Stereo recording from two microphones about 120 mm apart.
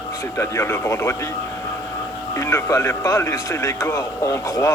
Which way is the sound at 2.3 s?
25° left (ahead or behind).